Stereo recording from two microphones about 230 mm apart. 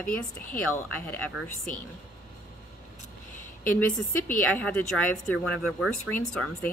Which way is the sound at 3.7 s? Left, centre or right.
Centre.